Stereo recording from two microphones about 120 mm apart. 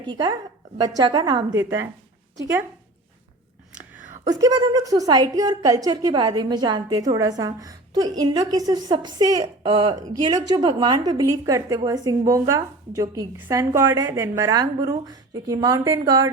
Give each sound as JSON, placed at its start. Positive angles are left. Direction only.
{"t": 0.0, "sound": "a woman's voice", "side_deg": -40}
{"t": 4.3, "sound": "a woman's voice", "side_deg": -30}